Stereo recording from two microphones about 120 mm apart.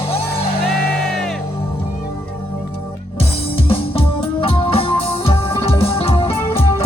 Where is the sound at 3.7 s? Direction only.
50° left (ahead or behind).